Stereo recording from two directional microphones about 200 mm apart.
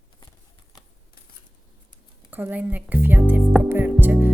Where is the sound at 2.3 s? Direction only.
10° right (ahead or behind).